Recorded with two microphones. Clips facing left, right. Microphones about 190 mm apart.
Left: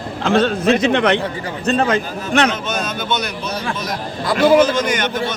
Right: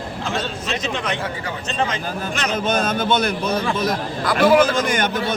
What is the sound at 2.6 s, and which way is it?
Speech, 55° right (ahead or behind).